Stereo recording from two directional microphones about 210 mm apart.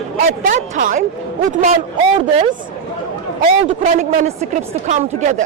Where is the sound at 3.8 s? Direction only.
35° right (ahead or behind).